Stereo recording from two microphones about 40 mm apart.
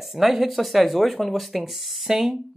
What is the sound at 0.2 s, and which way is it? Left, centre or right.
Speech, centre.